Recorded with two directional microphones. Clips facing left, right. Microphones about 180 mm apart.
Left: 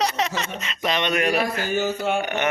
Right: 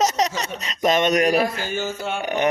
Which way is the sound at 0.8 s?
45° right (ahead or behind).